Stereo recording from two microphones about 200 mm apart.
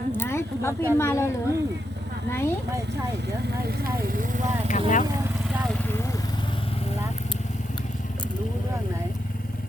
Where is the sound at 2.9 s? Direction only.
55° right (ahead or behind).